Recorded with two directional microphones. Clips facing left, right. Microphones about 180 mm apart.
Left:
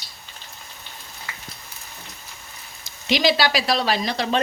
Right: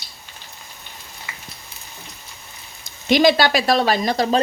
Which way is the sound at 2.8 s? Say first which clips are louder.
Right 6 dB; 50° right (ahead or behind).